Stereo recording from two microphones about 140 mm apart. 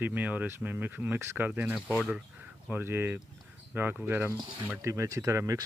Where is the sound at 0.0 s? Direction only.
10° right (ahead or behind).